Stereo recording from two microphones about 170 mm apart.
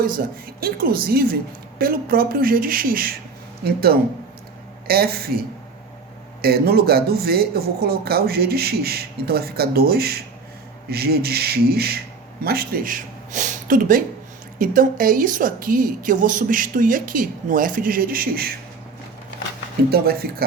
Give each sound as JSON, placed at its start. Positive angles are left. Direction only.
{"t": 0.0, "sound": "a man's voice", "side_deg": -60}
{"t": 19.8, "sound": "speech", "side_deg": -70}